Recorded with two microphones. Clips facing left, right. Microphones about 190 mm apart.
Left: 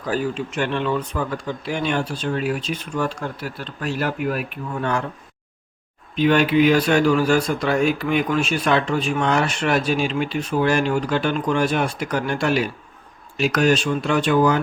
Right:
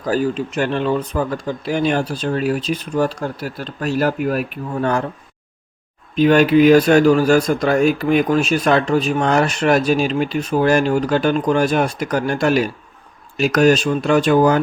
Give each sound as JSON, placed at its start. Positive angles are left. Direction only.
{"t": 0.0, "sound": "speech", "side_deg": -40}
{"t": 6.1, "sound": "speech", "side_deg": -45}